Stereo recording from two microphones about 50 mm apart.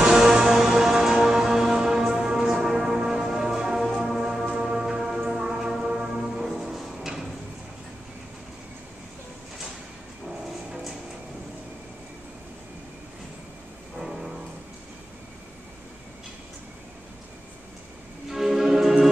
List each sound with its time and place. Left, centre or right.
0.0 s music: centre
10.7 s music: centre
13.9 s music: centre
18.3 s music: centre